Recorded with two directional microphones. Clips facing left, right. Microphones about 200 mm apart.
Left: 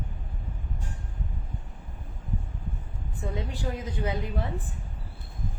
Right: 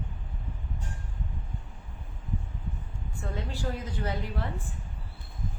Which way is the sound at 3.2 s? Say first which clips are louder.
Left 2 dB; 15° left (ahead or behind).